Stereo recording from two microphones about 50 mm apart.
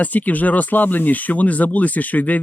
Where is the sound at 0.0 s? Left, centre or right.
Left.